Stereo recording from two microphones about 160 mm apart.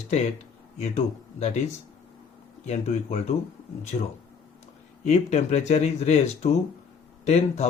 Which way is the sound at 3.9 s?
55° left (ahead or behind).